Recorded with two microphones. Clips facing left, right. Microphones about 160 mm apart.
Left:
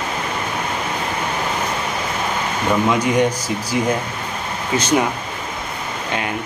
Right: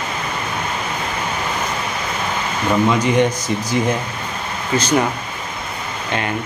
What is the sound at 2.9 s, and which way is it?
Speech, 10° left (ahead or behind).